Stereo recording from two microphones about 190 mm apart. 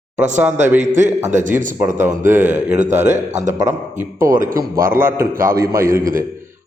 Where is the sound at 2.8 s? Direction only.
40° right (ahead or behind).